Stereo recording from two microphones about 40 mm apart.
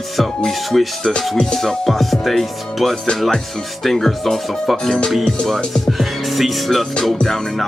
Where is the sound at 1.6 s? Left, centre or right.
Centre.